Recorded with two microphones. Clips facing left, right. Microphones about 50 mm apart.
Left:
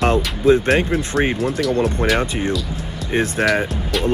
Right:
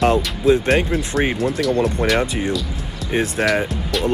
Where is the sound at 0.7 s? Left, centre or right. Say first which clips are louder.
Left 1 dB; centre.